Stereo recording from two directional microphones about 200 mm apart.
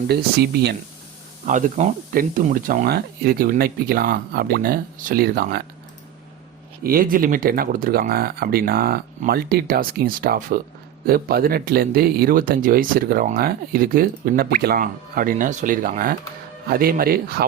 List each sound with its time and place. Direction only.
0.1 s speech: 50° right (ahead or behind)
1.5 s speech: 40° right (ahead or behind)
6.8 s speech: 45° right (ahead or behind)